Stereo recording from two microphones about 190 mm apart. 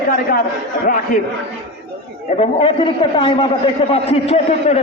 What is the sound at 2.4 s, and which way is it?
A man's voice, 25° left (ahead or behind).